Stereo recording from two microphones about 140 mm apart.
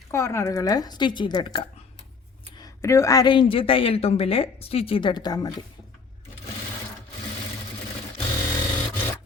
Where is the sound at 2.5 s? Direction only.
25° left (ahead or behind).